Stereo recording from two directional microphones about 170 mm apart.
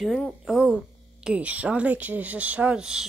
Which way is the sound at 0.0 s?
Centre (ahead or behind).